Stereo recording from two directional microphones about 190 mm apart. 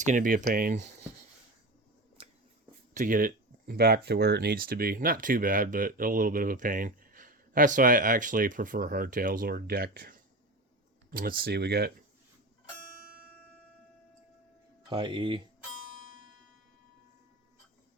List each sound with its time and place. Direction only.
0.0 s speech: 40° right (ahead or behind)
2.2 s a sound: 30° right (ahead or behind)
2.9 s speech: 45° right (ahead or behind); by 10.2 s 60° right (ahead or behind)
11.1 s speech: 50° right (ahead or behind)
14.8 s speech: 25° right (ahead or behind)